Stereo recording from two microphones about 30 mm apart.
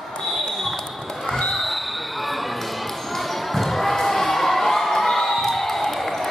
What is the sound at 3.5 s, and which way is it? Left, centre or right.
Basketball bounce, centre.